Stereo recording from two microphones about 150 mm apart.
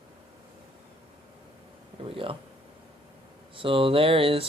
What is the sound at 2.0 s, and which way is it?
Speech, 35° right (ahead or behind).